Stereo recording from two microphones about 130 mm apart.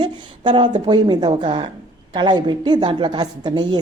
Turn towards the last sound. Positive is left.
turn(degrees=-35)  # may be behind; listen again after turning